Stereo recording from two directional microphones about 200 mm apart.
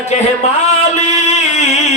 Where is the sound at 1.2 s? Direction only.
35° left (ahead or behind).